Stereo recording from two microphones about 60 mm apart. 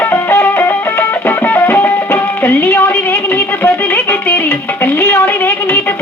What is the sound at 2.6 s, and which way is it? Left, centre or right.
Music, left.